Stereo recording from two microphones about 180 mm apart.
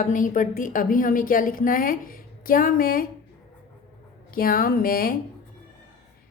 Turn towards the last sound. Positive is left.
turn(degrees=55)  # may be behind; listen again after turning